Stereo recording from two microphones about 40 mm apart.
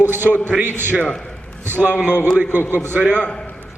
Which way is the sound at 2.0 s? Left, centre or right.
Right.